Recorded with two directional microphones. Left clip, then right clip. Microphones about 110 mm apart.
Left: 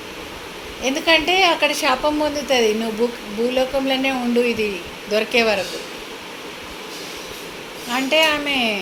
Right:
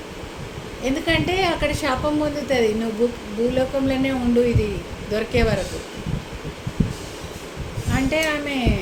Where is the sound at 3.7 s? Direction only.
20° right (ahead or behind).